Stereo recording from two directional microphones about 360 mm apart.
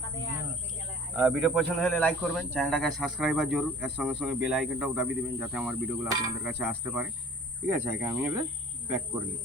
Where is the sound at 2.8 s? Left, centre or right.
Right.